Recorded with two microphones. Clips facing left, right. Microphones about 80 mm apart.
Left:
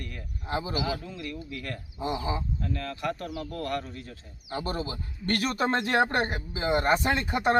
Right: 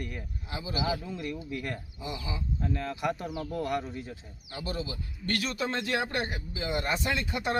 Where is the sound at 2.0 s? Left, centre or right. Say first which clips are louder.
Left 10 dB; left.